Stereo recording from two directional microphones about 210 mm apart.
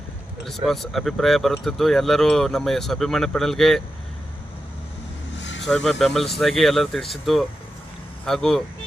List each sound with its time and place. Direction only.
0.4 s speech: centre (ahead or behind)
5.4 s vehicle: 60° left (ahead or behind)
5.6 s speech: 5° left (ahead or behind)